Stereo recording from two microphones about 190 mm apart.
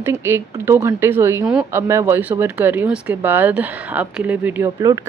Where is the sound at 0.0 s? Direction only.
10° right (ahead or behind).